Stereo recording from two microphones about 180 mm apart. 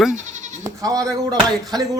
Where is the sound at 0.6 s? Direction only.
20° right (ahead or behind).